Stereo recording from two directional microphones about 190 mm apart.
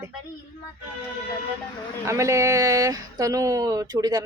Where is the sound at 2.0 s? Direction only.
15° right (ahead or behind).